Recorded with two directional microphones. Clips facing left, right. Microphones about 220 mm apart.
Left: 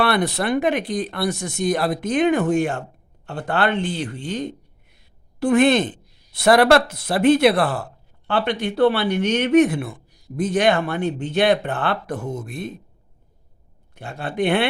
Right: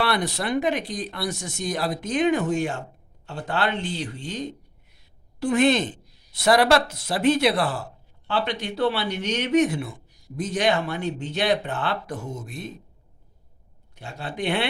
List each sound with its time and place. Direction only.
0.0 s a woman's voice: 55° left (ahead or behind)
13.9 s speech: 55° left (ahead or behind)